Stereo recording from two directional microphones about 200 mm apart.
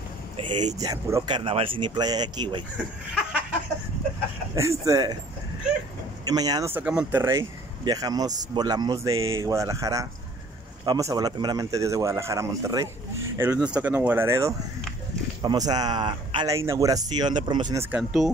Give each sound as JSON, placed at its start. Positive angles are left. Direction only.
{"t": 0.4, "sound": "speech", "side_deg": -30}
{"t": 0.7, "sound": "speech", "side_deg": -15}
{"t": 4.6, "sound": "speech", "side_deg": -15}
{"t": 6.2, "sound": "speech", "side_deg": -20}
{"t": 17.9, "sound": "speech", "side_deg": 0}